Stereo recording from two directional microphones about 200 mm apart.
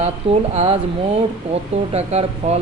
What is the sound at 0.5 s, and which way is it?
Speech, 30° right (ahead or behind).